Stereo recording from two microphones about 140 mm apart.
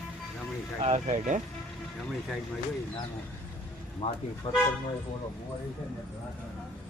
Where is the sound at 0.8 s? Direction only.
60° right (ahead or behind).